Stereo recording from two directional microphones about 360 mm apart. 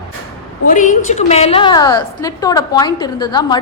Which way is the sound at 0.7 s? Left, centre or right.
Left.